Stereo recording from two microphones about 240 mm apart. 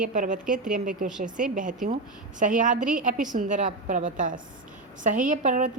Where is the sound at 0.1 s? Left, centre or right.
Right.